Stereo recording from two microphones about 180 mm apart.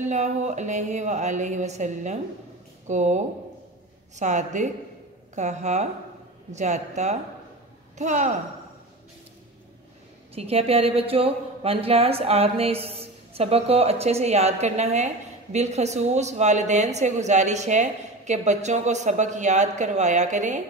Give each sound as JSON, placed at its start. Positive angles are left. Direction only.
{"t": 0.0, "sound": "a woman's voice", "side_deg": -40}
{"t": 10.3, "sound": "a woman's voice", "side_deg": -35}